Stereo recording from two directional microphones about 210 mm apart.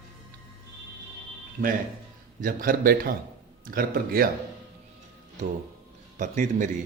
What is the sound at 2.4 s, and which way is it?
A man's voice, 40° right (ahead or behind).